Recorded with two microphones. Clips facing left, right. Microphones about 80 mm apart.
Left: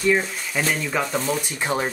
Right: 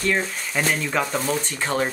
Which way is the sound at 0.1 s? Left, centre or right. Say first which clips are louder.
Left 2 dB; centre.